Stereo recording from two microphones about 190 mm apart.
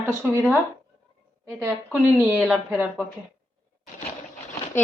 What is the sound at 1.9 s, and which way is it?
A woman's voice, centre (ahead or behind).